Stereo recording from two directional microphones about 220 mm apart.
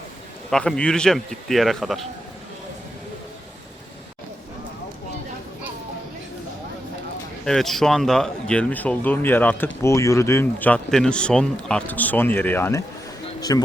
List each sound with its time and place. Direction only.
0.5 s speech: 5° left (ahead or behind)
7.4 s speech: centre (ahead or behind)